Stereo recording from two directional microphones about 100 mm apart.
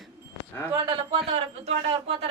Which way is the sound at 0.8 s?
55° right (ahead or behind).